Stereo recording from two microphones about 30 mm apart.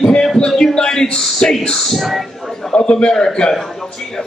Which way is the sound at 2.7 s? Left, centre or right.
Left.